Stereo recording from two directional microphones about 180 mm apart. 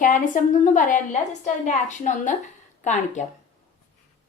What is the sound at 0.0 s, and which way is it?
A woman's voice, 45° left (ahead or behind).